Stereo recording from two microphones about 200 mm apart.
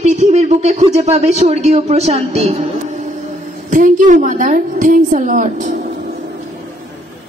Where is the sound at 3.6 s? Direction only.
40° right (ahead or behind).